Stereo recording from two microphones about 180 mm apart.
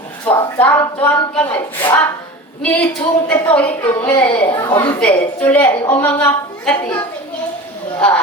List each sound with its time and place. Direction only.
0.3 s speech: 10° left (ahead or behind)
4.3 s a woman's voice: 30° left (ahead or behind)
4.9 s speech: 10° left (ahead or behind)